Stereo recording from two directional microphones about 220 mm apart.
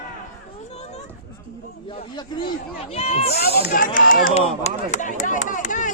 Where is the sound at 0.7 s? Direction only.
30° left (ahead or behind).